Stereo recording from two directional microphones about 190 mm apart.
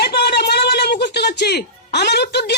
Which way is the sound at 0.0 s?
60° left (ahead or behind).